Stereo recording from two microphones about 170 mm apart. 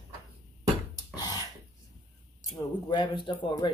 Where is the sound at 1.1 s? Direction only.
20° left (ahead or behind).